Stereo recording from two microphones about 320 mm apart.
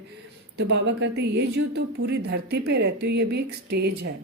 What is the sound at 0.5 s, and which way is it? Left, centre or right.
A woman's voice, right.